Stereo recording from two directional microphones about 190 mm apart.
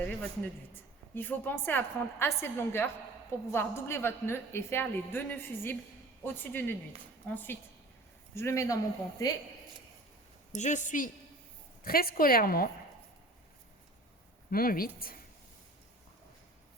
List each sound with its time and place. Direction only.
0.0 s a woman's voice: 5° left (ahead or behind)
10.5 s a woman's voice: 40° left (ahead or behind)
14.5 s a woman's voice: 50° left (ahead or behind)